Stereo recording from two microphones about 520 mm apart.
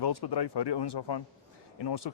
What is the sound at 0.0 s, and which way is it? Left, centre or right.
Speech, left.